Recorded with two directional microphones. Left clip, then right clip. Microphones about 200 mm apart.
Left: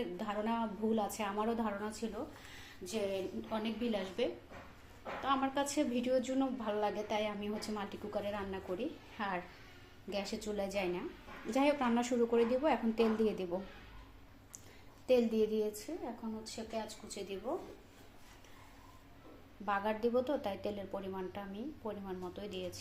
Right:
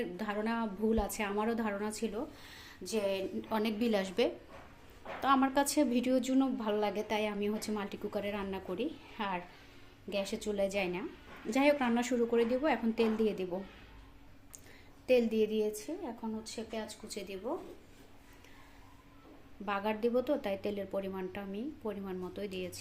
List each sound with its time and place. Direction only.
0.2 s a woman's voice: 40° right (ahead or behind)
2.8 s a woman's voice: 50° right (ahead or behind); by 13.6 s 25° right (ahead or behind)
15.0 s a woman's voice: 25° right (ahead or behind)
16.7 s a woman's voice: 45° right (ahead or behind)
19.6 s a woman's voice: 35° right (ahead or behind)